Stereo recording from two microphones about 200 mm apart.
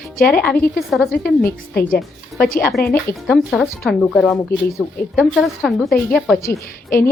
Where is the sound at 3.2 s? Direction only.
Centre (ahead or behind).